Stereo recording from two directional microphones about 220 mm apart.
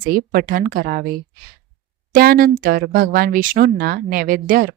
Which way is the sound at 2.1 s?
40° right (ahead or behind).